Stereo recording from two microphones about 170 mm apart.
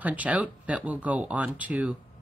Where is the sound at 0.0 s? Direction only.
10° right (ahead or behind).